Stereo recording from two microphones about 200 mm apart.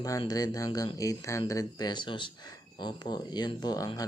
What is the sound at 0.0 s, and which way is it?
Speech, 20° left (ahead or behind).